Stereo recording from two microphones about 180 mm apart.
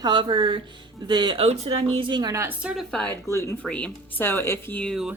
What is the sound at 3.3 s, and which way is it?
Speech, 15° left (ahead or behind).